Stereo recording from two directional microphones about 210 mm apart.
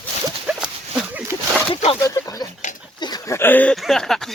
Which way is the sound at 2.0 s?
15° left (ahead or behind).